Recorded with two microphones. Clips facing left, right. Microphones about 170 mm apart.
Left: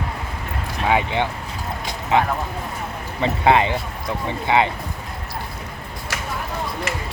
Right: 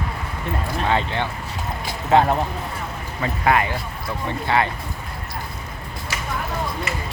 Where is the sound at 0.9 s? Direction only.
15° left (ahead or behind).